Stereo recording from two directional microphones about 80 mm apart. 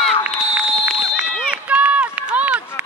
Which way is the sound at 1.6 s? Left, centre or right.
Centre.